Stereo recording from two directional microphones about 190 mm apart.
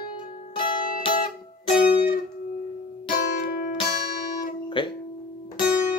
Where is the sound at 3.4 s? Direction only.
50° left (ahead or behind).